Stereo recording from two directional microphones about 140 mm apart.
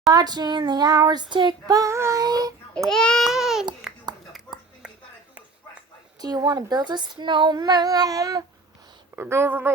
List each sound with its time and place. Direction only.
0.1 s child singing: 30° right (ahead or behind)
2.7 s speech: 5° left (ahead or behind)
6.2 s child singing: 30° right (ahead or behind)
9.1 s speech: 15° right (ahead or behind)